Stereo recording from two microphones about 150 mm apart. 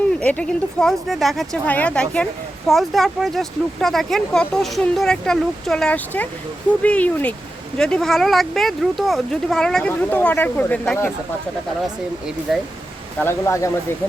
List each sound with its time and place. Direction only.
0.2 s speech: 10° left (ahead or behind)
12.5 s speech: centre (ahead or behind)
13.2 s speech: 20° left (ahead or behind)